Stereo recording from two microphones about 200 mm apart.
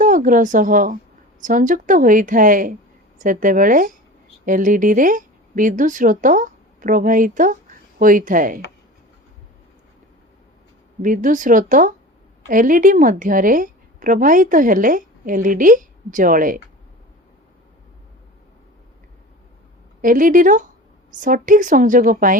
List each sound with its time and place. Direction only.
0.0 s a woman's voice: 40° right (ahead or behind)
11.0 s a woman's voice: 40° right (ahead or behind)
20.0 s a woman's voice: 40° right (ahead or behind)